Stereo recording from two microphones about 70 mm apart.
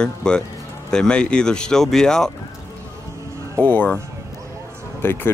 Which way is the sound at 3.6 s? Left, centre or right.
Left.